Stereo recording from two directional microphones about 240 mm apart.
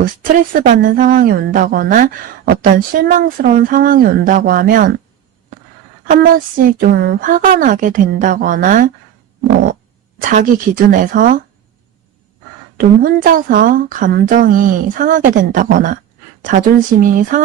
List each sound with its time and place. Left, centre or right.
0.0 s speech: right
6.2 s speech: right
10.2 s speech: right
12.7 s speech: right